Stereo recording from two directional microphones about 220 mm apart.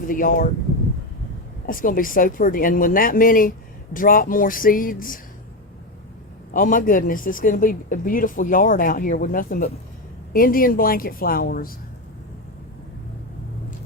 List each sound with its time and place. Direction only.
0.1 s speech: 40° left (ahead or behind)
1.6 s speech: 40° left (ahead or behind)
6.5 s speech: 35° left (ahead or behind)